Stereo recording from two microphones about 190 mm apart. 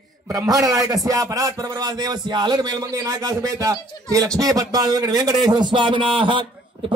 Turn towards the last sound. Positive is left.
turn(degrees=-25)  # may be behind; listen again after turning